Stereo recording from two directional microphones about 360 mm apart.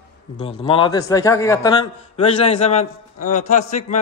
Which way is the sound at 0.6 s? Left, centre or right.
Centre.